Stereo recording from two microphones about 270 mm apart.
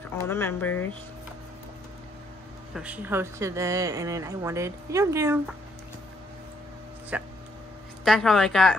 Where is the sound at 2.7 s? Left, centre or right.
Centre.